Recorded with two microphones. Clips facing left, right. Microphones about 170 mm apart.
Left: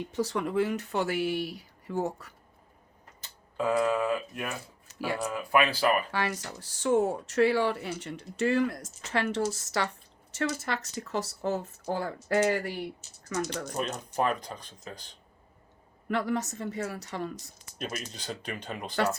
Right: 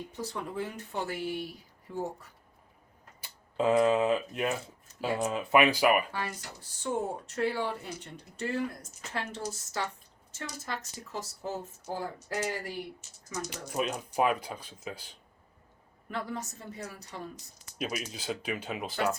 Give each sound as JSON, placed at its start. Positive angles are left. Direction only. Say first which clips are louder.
{"t": 0.1, "sound": "speech", "louder": "left 11 dB", "side_deg": 90}
{"t": 3.6, "sound": "speech", "louder": "right 2 dB", "side_deg": -20}
{"t": 4.9, "sound": "a sound", "louder": "left 2 dB", "side_deg": 85}
{"t": 5.2, "sound": "speech", "louder": "right 2 dB", "side_deg": -20}
{"t": 6.1, "sound": "speech", "louder": "left 5 dB", "side_deg": 90}
{"t": 13.2, "sound": "speech", "louder": "left 6 dB", "side_deg": 80}
{"t": 13.7, "sound": "speech", "louder": "right 2 dB", "side_deg": -5}
{"t": 16.0, "sound": "speech", "louder": "left 7 dB", "side_deg": 80}
{"t": 17.7, "sound": "speech", "louder": "right 2 dB", "side_deg": -5}